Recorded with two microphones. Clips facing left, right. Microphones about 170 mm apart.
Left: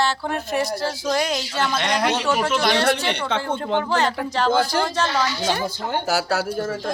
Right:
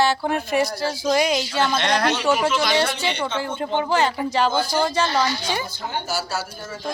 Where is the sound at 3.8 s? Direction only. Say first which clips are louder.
Right 1 dB; 5° right (ahead or behind).